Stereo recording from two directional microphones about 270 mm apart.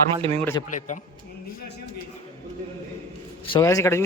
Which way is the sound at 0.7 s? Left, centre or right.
Left.